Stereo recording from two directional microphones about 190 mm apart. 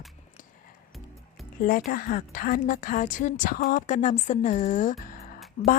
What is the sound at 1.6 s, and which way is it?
A woman's voice, 45° left (ahead or behind).